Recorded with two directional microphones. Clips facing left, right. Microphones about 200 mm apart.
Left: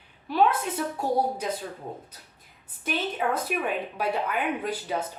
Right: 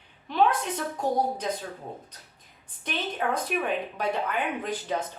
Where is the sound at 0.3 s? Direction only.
5° left (ahead or behind).